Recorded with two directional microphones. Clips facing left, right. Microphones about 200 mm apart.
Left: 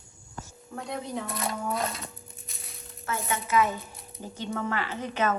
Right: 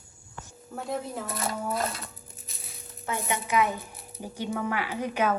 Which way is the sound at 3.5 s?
15° right (ahead or behind).